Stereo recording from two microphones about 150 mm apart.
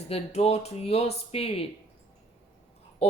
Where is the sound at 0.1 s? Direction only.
45° left (ahead or behind).